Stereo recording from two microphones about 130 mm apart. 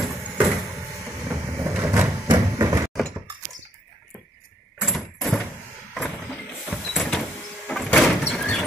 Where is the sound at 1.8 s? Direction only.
20° right (ahead or behind).